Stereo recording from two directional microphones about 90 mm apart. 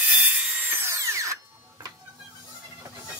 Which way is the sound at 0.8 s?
35° right (ahead or behind).